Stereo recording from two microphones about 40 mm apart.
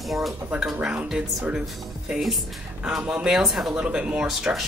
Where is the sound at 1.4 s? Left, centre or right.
Right.